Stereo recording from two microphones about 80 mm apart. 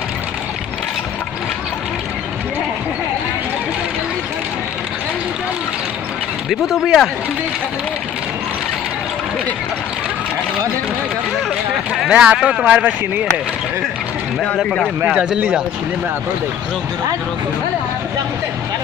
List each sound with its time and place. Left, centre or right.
6.5 s speech: centre
12.1 s speech: centre
12.6 s speech: centre
14.6 s speech: centre
15.0 s speech: centre